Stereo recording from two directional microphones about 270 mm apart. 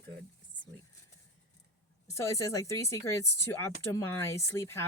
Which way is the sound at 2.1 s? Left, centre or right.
Centre.